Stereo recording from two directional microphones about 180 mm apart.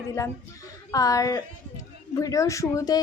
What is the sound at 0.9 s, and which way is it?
A woman's voice, 20° left (ahead or behind).